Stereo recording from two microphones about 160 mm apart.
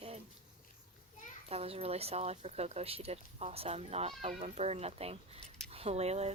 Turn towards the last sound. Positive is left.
turn(degrees=-40)  # may be behind; listen again after turning